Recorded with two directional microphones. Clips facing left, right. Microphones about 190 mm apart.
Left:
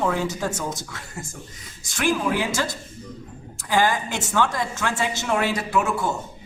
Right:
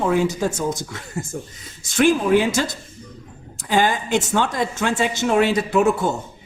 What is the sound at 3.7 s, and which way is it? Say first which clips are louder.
Speech: right 3 dB; 20° right (ahead or behind).